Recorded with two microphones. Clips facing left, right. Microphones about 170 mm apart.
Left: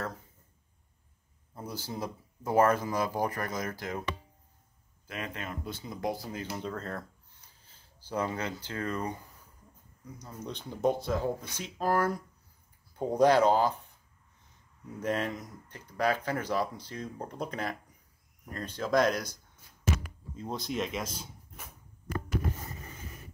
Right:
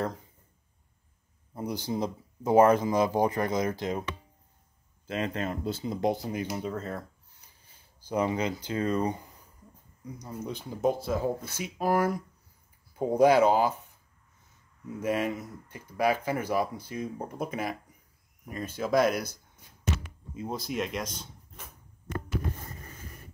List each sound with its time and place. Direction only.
1.5 s speech: 15° right (ahead or behind)
5.0 s speech: 30° right (ahead or behind); by 13.7 s 10° right (ahead or behind)
15.0 s speech: 10° right (ahead or behind)